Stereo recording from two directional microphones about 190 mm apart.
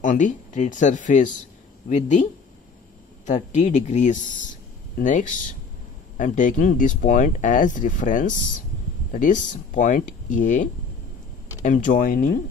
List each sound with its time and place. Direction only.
0.0 s speech: 40° left (ahead or behind)
3.3 s speech: 40° left (ahead or behind)